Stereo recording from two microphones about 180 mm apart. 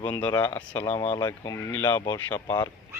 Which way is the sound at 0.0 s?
10° left (ahead or behind).